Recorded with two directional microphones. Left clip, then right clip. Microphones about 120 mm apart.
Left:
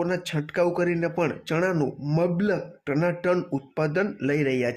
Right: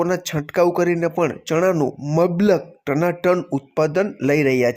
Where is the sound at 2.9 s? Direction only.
30° right (ahead or behind).